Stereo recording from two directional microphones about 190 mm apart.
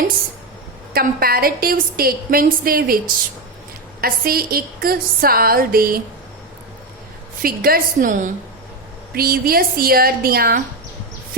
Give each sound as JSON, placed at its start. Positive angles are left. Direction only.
{"t": 0.9, "sound": "a woman's voice", "side_deg": -55}
{"t": 4.0, "sound": "a woman's voice", "side_deg": -50}
{"t": 7.4, "sound": "a woman's voice", "side_deg": -50}